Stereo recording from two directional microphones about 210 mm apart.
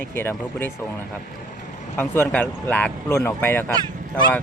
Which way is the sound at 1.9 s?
10° left (ahead or behind).